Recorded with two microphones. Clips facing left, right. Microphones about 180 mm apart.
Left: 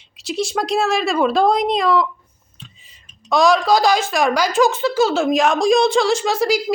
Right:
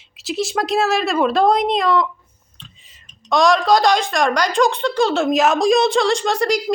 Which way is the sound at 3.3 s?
Centre (ahead or behind).